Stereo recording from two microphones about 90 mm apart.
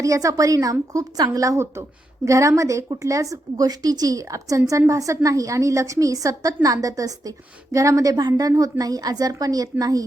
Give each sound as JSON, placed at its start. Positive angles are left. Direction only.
{"t": 0.0, "sound": "a woman's voice", "side_deg": -40}